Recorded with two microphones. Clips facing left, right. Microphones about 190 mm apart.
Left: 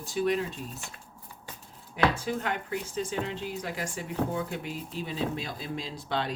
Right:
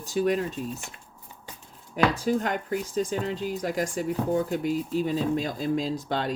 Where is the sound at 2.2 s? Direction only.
40° right (ahead or behind).